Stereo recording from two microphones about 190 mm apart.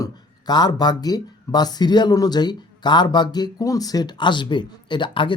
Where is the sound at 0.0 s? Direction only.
20° left (ahead or behind).